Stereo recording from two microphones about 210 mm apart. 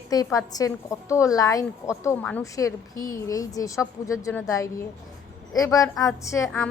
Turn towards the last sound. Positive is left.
turn(degrees=15)  # may be behind; listen again after turning